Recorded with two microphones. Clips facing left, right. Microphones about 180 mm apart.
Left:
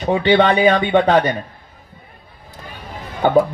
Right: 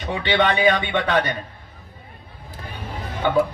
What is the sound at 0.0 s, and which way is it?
Speech, 40° left (ahead or behind).